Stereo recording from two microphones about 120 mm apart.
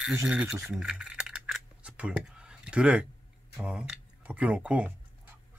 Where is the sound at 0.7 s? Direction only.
5° right (ahead or behind).